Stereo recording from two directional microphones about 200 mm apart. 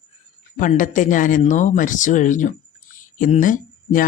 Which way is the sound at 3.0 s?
40° left (ahead or behind).